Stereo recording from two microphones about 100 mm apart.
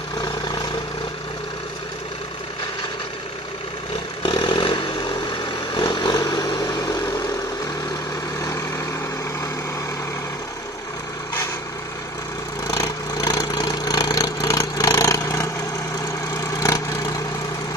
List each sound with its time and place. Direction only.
4.2 s vehicle: 55° left (ahead or behind)
6.1 s vehicle: 40° left (ahead or behind)
12.6 s vehicle: 40° left (ahead or behind)